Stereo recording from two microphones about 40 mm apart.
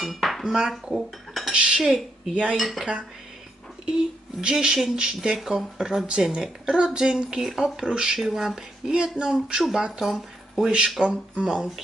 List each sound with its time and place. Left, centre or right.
0.0 s dishes: centre
0.4 s speech: centre
0.9 s cutlery: centre
1.5 s speech: right
1.8 s a woman's voice: centre
2.5 s cutlery: centre
2.8 s speech: right
4.4 s speech: right
10.0 s speech: centre
11.0 s speech: right